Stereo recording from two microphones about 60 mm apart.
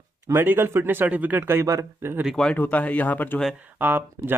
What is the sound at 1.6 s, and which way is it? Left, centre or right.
Speech, right.